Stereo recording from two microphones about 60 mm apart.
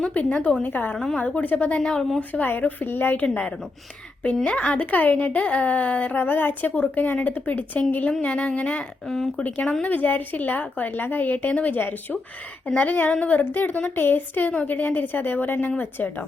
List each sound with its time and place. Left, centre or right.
0.0 s a woman's voice: left
0.9 s a woman's voice: centre
1.2 s a woman's voice: left
1.8 s a woman's voice: centre
2.5 s a woman's voice: left
4.4 s a woman's voice: left
9.0 s speech: centre
9.4 s a woman's voice: left
13.4 s a woman's voice: left